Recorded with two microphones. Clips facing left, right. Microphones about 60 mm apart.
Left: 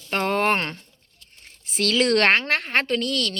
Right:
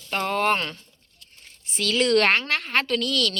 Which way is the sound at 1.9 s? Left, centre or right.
Left.